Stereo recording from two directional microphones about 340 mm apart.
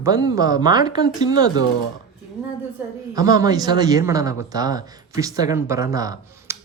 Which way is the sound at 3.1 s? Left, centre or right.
Centre.